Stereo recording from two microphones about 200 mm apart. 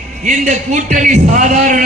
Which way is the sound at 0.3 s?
40° right (ahead or behind).